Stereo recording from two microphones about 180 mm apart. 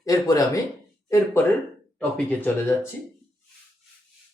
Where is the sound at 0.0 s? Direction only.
20° left (ahead or behind).